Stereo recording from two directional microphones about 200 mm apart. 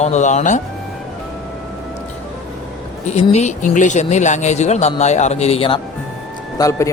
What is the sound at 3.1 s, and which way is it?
Speech, 35° left (ahead or behind).